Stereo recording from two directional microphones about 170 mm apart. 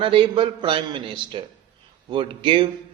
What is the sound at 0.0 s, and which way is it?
A man's voice, 30° right (ahead or behind).